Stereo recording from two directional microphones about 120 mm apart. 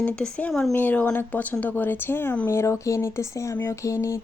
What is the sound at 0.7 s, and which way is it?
Speech, 15° left (ahead or behind).